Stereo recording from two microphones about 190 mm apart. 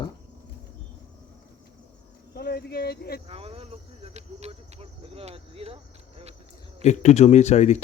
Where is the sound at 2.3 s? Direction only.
55° left (ahead or behind).